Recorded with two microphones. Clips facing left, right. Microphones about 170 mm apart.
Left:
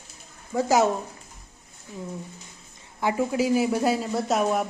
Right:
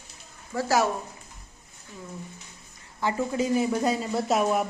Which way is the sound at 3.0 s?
10° left (ahead or behind).